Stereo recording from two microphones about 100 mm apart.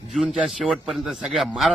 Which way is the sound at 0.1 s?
10° right (ahead or behind).